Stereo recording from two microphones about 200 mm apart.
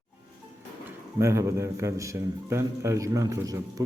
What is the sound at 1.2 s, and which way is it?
A man's voice, 15° right (ahead or behind).